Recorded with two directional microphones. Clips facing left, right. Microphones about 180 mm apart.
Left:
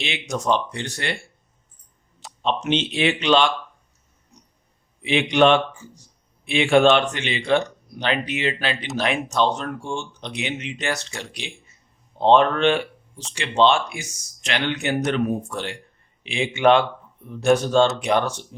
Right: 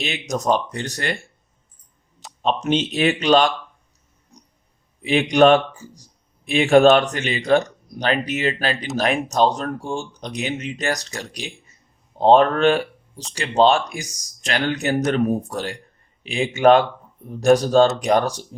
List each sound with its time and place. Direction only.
0.0 s speech: 40° right (ahead or behind)
2.4 s speech: 40° right (ahead or behind)
5.0 s speech: 40° right (ahead or behind)